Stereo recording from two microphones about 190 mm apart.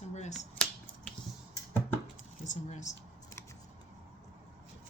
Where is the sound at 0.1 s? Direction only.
40° left (ahead or behind).